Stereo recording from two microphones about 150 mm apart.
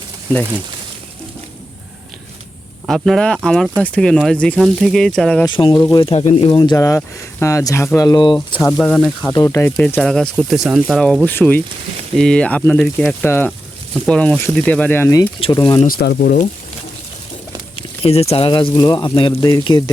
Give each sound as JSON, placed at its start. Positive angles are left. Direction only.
{"t": 2.8, "sound": "speech", "side_deg": 0}
{"t": 5.5, "sound": "speech", "side_deg": 35}
{"t": 8.4, "sound": "speech", "side_deg": 10}
{"t": 9.2, "sound": "speech", "side_deg": 25}
{"t": 9.7, "sound": "speech", "side_deg": 10}
{"t": 15.5, "sound": "speech", "side_deg": 30}
{"t": 15.9, "sound": "speech", "side_deg": 90}
{"t": 17.7, "sound": "speech", "side_deg": 40}